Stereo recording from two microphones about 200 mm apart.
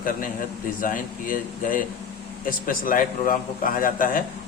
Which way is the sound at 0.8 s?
45° left (ahead or behind).